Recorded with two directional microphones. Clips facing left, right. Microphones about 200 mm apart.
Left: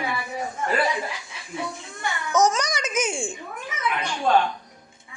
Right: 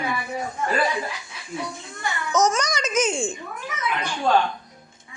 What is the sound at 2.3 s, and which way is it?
A child's voice, 15° left (ahead or behind).